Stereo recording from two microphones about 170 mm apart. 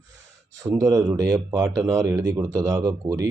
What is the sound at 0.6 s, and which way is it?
Speech, 20° right (ahead or behind).